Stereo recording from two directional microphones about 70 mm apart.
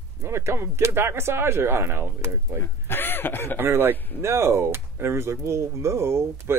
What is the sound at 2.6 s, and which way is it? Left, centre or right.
Speech, left.